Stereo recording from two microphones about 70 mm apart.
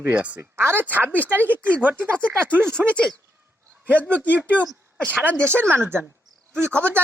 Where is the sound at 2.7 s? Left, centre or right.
Centre.